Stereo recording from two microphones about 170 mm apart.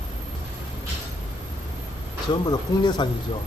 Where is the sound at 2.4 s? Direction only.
25° left (ahead or behind).